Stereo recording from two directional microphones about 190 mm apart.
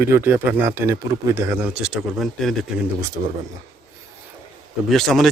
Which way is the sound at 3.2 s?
35° right (ahead or behind).